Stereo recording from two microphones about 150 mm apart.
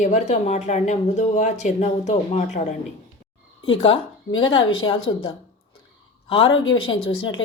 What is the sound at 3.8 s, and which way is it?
Speech, 35° left (ahead or behind).